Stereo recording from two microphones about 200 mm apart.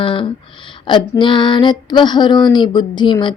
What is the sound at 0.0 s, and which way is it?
Speech, 25° left (ahead or behind).